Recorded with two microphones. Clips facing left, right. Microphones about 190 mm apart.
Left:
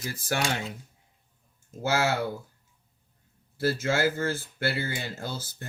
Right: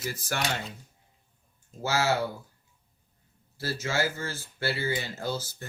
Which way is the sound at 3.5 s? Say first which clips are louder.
Left 4 dB; 55° left (ahead or behind).